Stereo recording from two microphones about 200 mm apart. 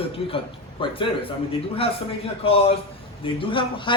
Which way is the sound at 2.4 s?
30° left (ahead or behind).